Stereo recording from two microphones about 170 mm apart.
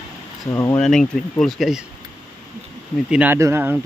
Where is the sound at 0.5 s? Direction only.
20° left (ahead or behind).